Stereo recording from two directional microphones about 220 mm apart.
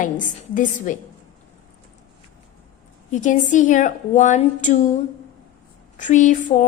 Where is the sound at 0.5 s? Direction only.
35° left (ahead or behind).